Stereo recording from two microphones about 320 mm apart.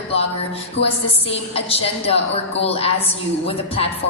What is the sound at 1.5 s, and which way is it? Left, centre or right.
A woman's voice, centre.